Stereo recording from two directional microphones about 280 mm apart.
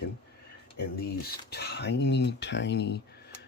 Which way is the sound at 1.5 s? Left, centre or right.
Left.